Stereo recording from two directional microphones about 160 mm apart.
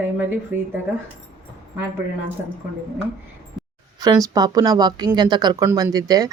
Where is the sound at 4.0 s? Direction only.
25° right (ahead or behind).